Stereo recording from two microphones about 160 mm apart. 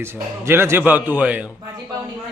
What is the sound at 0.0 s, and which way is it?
A man's voice, 15° right (ahead or behind).